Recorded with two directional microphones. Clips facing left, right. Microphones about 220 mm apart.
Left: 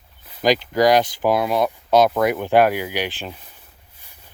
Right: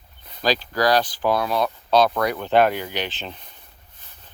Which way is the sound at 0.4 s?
15° left (ahead or behind).